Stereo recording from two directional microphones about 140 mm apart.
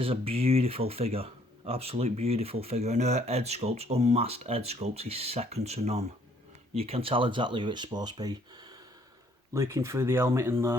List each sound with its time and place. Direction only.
0.0 s speech: 40° right (ahead or behind); by 10.8 s 20° right (ahead or behind)